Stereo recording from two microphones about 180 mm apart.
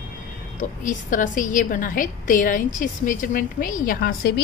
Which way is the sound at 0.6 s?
45° left (ahead or behind).